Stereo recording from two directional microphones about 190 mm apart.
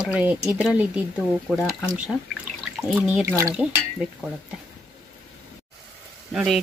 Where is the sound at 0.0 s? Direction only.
5° right (ahead or behind).